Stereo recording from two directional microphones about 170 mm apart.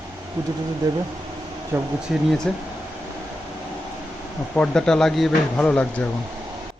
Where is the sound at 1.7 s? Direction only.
10° right (ahead or behind).